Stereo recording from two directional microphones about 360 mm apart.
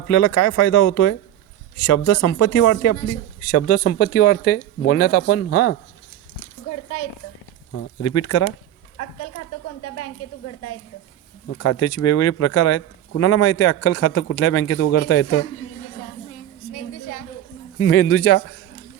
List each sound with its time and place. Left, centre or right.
0.1 s speech: left
3.8 s speech: left
7.7 s speech: left
11.4 s speech: left
17.7 s speech: left